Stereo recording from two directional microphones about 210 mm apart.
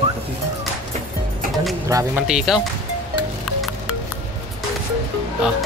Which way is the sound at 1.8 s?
15° right (ahead or behind).